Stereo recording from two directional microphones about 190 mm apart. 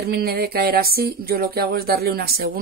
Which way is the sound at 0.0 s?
55° right (ahead or behind).